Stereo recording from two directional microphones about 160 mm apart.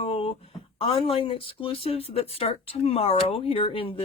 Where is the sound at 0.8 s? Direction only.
35° left (ahead or behind).